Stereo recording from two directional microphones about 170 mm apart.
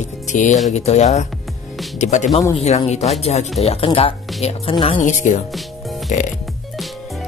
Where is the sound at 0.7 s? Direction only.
40° left (ahead or behind).